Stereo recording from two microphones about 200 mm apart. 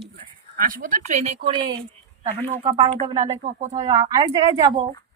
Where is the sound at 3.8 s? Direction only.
15° right (ahead or behind).